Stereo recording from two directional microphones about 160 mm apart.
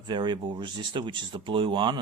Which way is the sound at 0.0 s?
30° right (ahead or behind).